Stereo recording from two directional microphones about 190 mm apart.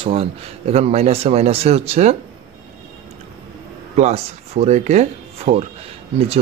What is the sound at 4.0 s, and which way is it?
Speech, 35° right (ahead or behind).